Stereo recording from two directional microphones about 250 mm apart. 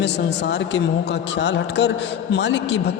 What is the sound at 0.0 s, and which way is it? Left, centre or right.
Speech, left.